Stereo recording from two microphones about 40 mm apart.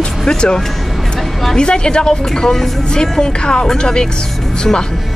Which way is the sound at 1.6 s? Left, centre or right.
Left.